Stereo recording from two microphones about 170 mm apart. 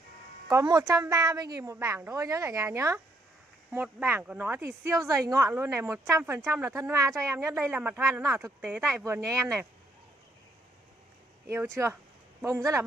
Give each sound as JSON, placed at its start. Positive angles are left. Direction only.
{"t": 0.5, "sound": "speech", "side_deg": -20}
{"t": 11.4, "sound": "speech", "side_deg": -15}